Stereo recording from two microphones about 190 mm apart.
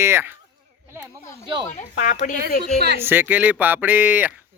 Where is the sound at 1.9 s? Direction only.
40° left (ahead or behind).